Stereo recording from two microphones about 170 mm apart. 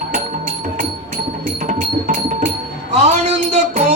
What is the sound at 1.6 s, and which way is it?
Music, 50° right (ahead or behind).